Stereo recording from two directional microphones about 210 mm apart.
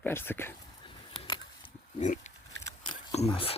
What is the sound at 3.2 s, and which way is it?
Speech, 25° left (ahead or behind).